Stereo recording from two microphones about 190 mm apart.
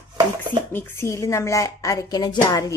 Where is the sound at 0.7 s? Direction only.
10° left (ahead or behind).